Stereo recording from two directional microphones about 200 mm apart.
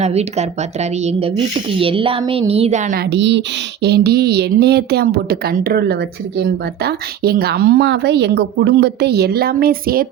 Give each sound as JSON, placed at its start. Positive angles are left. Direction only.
{"t": 0.0, "sound": "speech", "side_deg": -35}
{"t": 3.0, "sound": "a woman's voice", "side_deg": -60}